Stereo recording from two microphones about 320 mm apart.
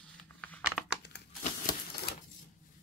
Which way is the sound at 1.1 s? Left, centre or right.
Left.